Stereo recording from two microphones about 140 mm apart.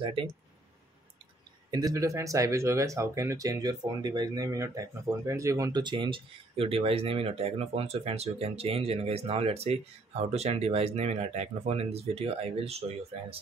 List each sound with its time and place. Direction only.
0.0 s speech: 35° right (ahead or behind)
1.7 s speech: 25° right (ahead or behind); by 13.4 s 45° right (ahead or behind)